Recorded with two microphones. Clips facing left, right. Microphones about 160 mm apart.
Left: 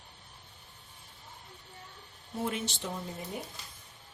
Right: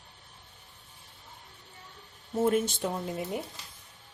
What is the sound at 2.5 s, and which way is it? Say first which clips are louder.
Speech: right 9 dB; 50° right (ahead or behind).